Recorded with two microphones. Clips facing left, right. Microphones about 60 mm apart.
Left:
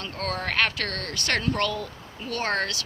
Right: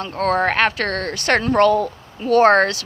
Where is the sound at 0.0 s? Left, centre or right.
Right.